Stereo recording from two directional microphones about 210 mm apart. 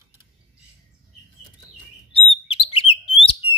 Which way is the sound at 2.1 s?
25° left (ahead or behind).